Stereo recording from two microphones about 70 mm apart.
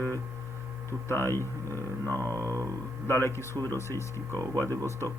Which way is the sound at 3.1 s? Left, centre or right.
Left.